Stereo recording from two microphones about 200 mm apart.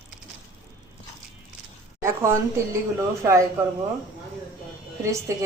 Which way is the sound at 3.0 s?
15° right (ahead or behind).